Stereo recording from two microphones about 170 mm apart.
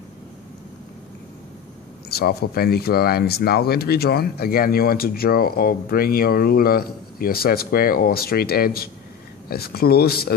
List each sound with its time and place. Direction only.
2.0 s speech: 65° left (ahead or behind)